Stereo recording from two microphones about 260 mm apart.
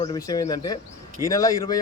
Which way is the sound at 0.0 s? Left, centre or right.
Centre.